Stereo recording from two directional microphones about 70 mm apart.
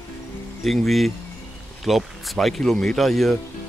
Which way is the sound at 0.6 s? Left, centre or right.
Centre.